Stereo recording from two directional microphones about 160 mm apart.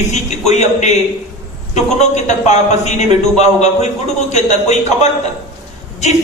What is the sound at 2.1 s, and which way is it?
A man's voice, 45° left (ahead or behind).